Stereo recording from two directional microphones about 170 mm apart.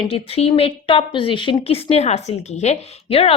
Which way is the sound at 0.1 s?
35° left (ahead or behind).